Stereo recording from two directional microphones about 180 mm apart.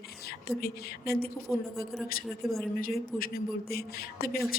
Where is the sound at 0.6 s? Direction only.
60° left (ahead or behind).